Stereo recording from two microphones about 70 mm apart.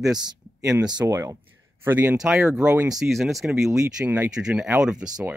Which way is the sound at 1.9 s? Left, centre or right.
Right.